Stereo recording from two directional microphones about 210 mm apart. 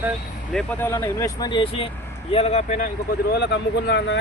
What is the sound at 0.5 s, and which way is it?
Speech, 10° left (ahead or behind).